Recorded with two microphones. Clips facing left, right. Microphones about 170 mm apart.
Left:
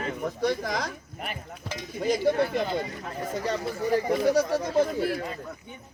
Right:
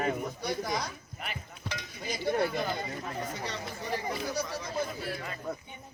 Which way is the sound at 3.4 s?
45° left (ahead or behind).